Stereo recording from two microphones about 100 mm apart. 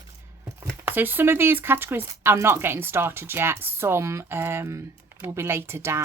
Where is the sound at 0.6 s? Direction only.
20° right (ahead or behind).